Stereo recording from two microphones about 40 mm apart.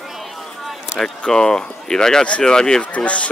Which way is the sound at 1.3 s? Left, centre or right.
Centre.